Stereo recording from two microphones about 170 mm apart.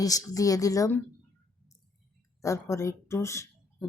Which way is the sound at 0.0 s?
20° left (ahead or behind).